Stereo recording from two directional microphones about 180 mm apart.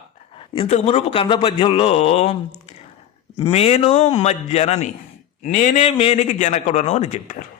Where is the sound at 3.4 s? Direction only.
35° left (ahead or behind).